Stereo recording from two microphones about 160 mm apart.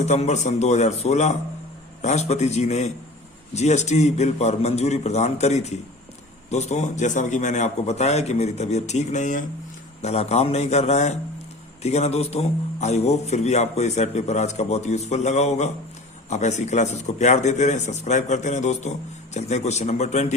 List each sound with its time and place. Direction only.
0.0 s a man's voice: 45° left (ahead or behind)